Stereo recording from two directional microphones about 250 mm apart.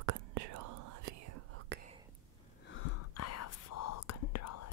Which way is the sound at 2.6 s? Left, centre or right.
Left.